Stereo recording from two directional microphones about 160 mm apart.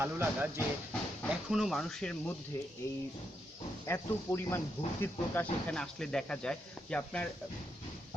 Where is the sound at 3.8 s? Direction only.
15° left (ahead or behind).